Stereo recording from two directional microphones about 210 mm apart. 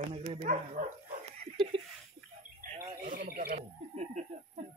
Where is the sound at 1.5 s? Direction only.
25° right (ahead or behind).